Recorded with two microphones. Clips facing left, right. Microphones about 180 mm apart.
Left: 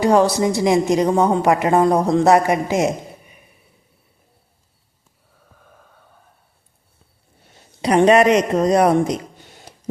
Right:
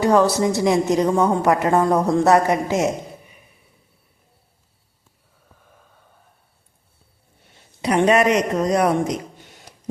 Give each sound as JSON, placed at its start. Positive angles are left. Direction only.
{"t": 0.0, "sound": "a woman's voice", "side_deg": 15}
{"t": 7.8, "sound": "speech", "side_deg": 35}